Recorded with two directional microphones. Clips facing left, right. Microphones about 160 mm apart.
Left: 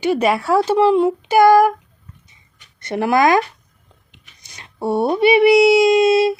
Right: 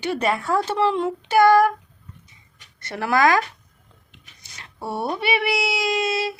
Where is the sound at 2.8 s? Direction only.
20° left (ahead or behind).